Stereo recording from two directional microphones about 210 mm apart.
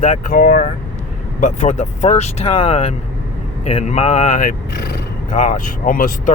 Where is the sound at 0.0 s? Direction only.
40° left (ahead or behind).